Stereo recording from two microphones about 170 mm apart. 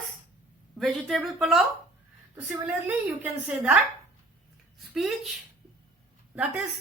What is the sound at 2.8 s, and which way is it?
Speech, 10° right (ahead or behind).